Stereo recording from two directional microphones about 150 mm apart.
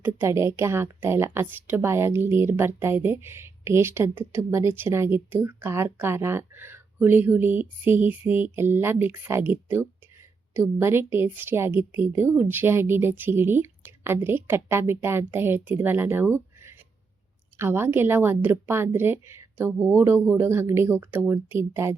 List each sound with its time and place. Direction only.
0.0 s a woman's voice: 15° right (ahead or behind)